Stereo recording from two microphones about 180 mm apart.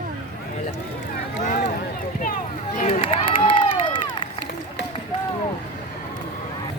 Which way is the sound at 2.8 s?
35° left (ahead or behind).